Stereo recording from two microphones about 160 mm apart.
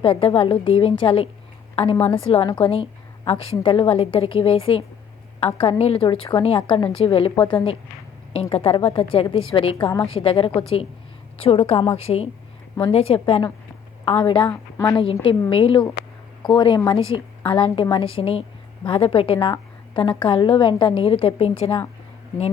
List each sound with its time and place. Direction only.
0.0 s a woman's voice: 35° left (ahead or behind)
14.5 s a woman's voice: 10° left (ahead or behind)
14.9 s a woman's voice: 35° left (ahead or behind)